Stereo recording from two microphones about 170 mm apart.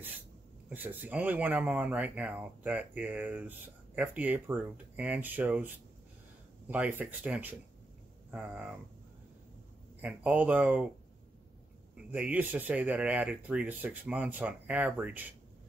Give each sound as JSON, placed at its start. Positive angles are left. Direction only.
{"t": 0.7, "sound": "speech", "side_deg": -10}
{"t": 6.7, "sound": "speech", "side_deg": -10}
{"t": 10.0, "sound": "speech", "side_deg": -10}
{"t": 12.1, "sound": "speech", "side_deg": -10}